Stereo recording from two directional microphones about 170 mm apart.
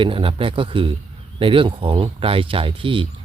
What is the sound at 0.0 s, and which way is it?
Speech, 30° right (ahead or behind).